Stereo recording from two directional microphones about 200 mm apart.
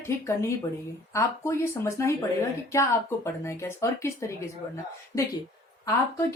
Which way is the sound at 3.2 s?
15° left (ahead or behind).